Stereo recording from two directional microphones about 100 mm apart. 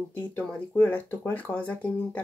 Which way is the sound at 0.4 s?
15° left (ahead or behind).